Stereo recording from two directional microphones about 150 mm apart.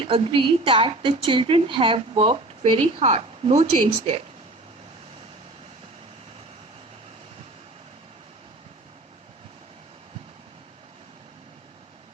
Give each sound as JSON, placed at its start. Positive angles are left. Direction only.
{"t": 0.0, "sound": "speech", "side_deg": -35}